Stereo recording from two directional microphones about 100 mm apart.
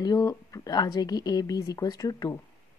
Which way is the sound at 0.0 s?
35° left (ahead or behind).